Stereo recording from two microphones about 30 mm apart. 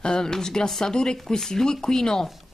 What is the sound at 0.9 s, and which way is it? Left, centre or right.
Speech, left.